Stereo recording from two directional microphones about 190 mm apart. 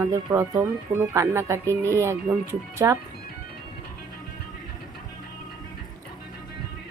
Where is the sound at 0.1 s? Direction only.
20° right (ahead or behind).